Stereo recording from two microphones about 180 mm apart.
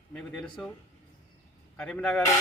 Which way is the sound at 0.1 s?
5° left (ahead or behind).